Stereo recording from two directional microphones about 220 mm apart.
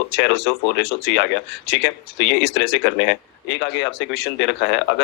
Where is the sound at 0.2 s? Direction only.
50° left (ahead or behind).